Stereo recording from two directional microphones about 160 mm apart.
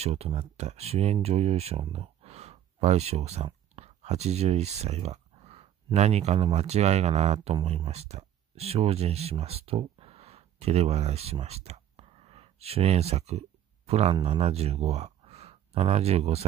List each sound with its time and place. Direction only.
0.0 s speech: 40° right (ahead or behind)